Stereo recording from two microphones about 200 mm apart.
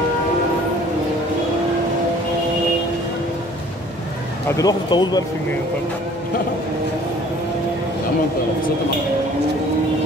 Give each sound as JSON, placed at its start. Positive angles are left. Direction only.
{"t": 4.5, "sound": "speech", "side_deg": 15}